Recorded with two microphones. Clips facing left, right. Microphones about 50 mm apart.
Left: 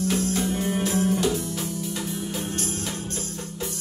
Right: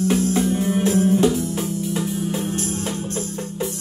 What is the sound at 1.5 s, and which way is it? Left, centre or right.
Music, right.